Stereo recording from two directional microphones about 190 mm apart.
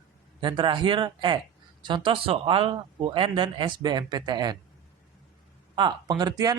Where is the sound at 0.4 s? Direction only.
25° right (ahead or behind).